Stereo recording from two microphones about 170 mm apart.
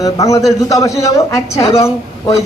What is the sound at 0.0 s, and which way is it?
A woman's voice, 20° left (ahead or behind).